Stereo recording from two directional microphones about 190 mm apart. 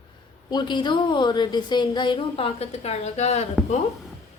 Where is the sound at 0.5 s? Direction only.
25° left (ahead or behind).